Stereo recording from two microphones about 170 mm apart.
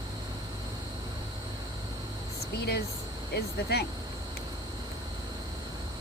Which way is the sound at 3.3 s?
75° left (ahead or behind).